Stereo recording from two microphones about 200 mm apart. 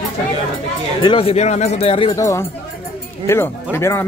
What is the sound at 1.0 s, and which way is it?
Speech, 25° left (ahead or behind).